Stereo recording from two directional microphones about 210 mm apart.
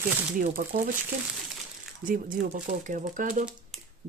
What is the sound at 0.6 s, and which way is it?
Speech, 45° right (ahead or behind).